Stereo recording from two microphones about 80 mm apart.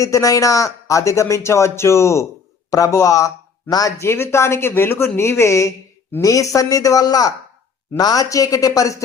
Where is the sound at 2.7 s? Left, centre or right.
Left.